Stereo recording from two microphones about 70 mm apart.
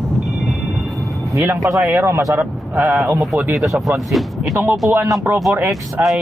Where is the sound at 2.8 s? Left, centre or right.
Centre.